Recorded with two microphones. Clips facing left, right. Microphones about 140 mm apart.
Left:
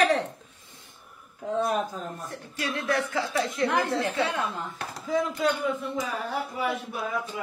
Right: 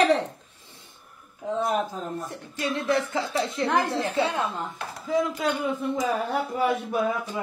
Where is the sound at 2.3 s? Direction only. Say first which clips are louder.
Right 3 dB; 20° right (ahead or behind).